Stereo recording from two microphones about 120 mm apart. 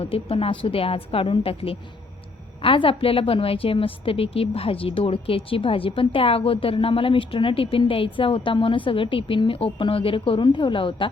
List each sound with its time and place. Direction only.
0.0 s a woman's voice: 50° left (ahead or behind)